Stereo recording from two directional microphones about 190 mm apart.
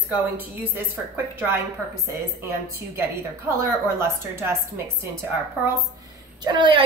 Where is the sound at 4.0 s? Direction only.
15° right (ahead or behind).